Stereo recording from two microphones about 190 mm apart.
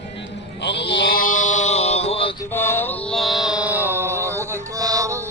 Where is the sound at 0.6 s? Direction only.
65° left (ahead or behind); by 2.3 s 30° left (ahead or behind).